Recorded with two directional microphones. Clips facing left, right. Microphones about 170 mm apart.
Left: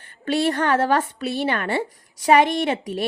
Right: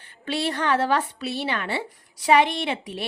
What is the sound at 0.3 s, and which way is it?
A woman's voice, 50° left (ahead or behind).